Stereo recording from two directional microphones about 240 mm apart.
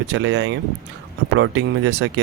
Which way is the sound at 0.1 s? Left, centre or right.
Right.